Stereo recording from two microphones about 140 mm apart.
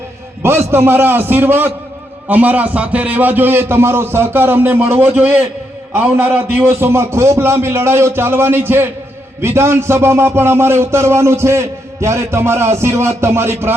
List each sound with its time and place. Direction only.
0.7 s a man's voice: 15° right (ahead or behind)